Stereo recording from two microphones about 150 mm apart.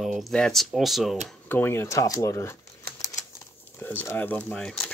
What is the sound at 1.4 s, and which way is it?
Speech, 15° left (ahead or behind).